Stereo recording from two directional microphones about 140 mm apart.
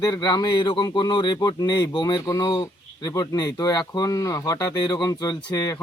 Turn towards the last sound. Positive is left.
turn(degrees=30)  # may be behind; listen again after turning